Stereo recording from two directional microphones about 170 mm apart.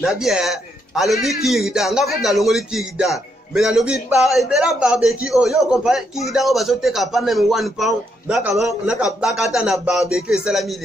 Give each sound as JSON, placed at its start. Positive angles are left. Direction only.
{"t": 0.0, "sound": "a man's voice", "side_deg": -5}